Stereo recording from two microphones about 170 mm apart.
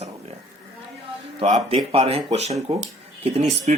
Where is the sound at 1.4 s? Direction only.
35° right (ahead or behind).